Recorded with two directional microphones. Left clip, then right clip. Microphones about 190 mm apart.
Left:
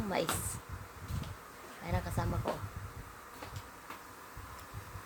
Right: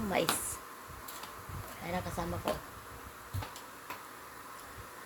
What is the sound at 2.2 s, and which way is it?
Speech, 10° left (ahead or behind).